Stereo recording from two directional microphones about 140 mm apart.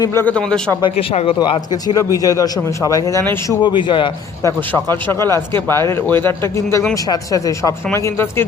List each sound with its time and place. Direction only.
0.0 s speech: 20° left (ahead or behind)
0.3 s speech: 5° left (ahead or behind)
0.8 s a man's voice: 40° left (ahead or behind)
4.7 s a man's voice: 15° left (ahead or behind)